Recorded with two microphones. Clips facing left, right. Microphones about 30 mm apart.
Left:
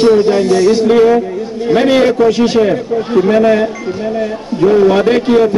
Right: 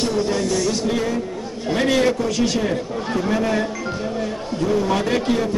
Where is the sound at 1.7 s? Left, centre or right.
Left.